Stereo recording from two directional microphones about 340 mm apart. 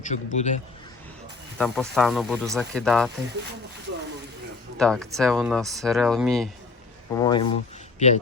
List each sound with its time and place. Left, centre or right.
0.0 s a man's voice: left
1.5 s speech: centre
4.8 s speech: centre
7.1 s a man's voice: centre